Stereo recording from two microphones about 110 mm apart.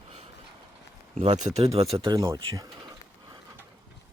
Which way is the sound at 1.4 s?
80° right.